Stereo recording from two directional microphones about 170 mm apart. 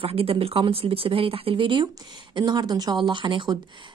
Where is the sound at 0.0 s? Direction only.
35° right (ahead or behind).